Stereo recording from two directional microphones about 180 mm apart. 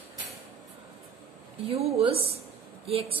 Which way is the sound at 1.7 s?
35° right (ahead or behind).